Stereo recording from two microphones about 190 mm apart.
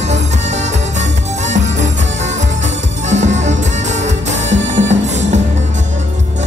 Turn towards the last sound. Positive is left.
turn(degrees=-35)  # may be behind; listen again after turning